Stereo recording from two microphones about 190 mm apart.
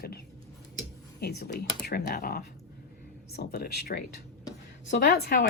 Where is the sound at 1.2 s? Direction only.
55° left (ahead or behind).